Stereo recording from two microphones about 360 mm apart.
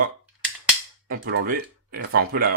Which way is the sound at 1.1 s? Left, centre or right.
Right.